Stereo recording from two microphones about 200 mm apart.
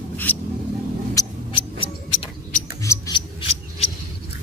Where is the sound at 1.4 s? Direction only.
25° left (ahead or behind).